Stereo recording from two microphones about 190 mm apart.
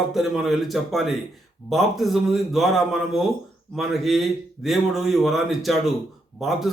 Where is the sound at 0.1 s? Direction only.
Centre (ahead or behind).